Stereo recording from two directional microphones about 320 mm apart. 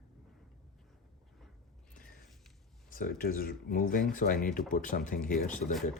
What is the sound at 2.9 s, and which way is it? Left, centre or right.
Speech, left.